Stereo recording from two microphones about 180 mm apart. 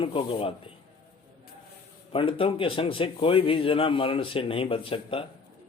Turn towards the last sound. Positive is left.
turn(degrees=30)  # may be behind; listen again after turning